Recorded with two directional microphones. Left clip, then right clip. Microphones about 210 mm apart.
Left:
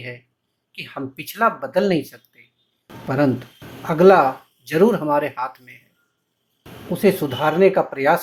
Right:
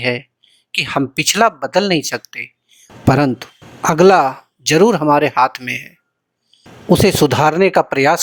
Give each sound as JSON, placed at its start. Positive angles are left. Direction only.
{"t": 0.7, "sound": "speech", "side_deg": -45}
{"t": 6.9, "sound": "speech", "side_deg": -45}